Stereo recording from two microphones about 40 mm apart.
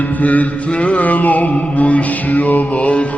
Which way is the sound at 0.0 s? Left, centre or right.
Left.